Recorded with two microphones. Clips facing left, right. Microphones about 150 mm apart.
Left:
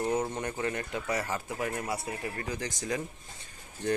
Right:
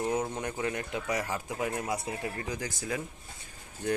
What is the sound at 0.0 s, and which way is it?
Speech, 10° right (ahead or behind).